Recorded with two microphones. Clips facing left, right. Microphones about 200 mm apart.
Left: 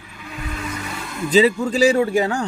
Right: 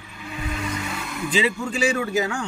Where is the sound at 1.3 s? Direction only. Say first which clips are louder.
Left 8 dB; 40° left (ahead or behind).